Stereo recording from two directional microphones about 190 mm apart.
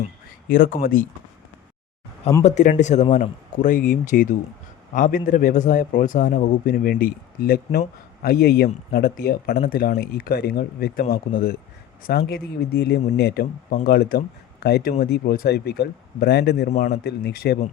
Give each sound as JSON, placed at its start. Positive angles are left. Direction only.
{"t": 0.0, "sound": "speech", "side_deg": 50}
{"t": 2.4, "sound": "a man's voice", "side_deg": 40}